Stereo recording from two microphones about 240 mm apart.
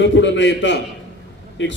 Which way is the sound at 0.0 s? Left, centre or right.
Left.